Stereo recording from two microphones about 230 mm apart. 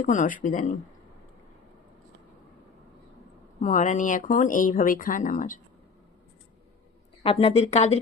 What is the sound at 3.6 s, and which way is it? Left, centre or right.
Speech, left.